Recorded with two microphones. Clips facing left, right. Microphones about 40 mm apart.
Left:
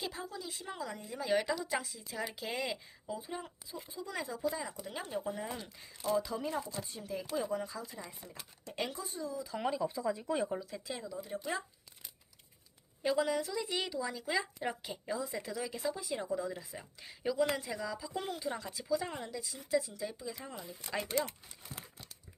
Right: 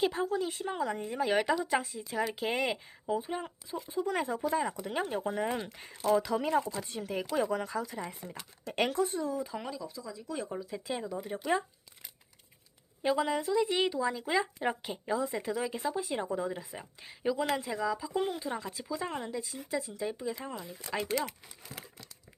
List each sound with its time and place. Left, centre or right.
0.0 s speech: right
3.8 s speech: right
8.3 s speech: right
8.7 s speech: right
9.6 s speech: left
10.5 s speech: centre
10.8 s speech: right
11.1 s speech: right
13.0 s speech: right
20.3 s speech: right